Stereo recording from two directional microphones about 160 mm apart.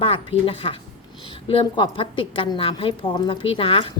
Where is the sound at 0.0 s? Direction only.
35° left (ahead or behind).